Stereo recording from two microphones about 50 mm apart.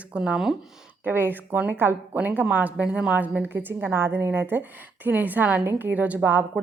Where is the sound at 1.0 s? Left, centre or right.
Right.